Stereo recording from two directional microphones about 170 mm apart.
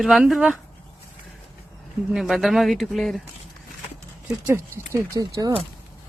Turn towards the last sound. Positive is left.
turn(degrees=-20)  # may be behind; listen again after turning